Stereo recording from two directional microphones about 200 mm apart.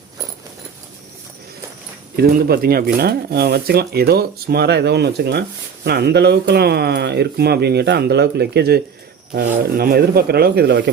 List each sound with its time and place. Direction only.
2.1 s speech: 50° right (ahead or behind)